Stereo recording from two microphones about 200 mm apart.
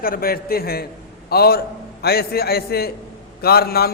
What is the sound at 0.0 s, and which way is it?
A man's voice, 45° left (ahead or behind).